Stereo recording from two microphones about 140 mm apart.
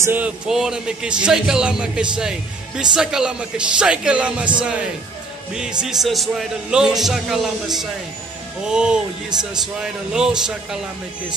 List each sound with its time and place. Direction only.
0.0 s a man's voice: 15° right (ahead or behind)
9.3 s a man's voice: 30° right (ahead or behind)
9.8 s speech: 5° right (ahead or behind)